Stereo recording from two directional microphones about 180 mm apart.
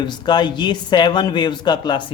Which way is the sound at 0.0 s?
25° left (ahead or behind).